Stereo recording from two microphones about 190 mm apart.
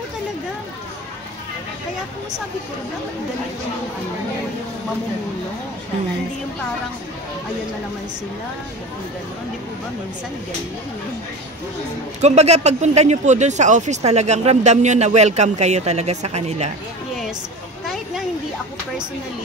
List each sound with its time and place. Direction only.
12.2 s speech: 35° right (ahead or behind)